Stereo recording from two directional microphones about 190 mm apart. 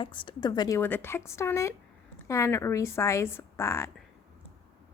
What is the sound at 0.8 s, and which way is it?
Speech, 10° left (ahead or behind).